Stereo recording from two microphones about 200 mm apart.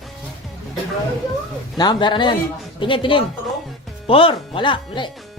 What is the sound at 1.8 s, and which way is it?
Speech, 20° left (ahead or behind).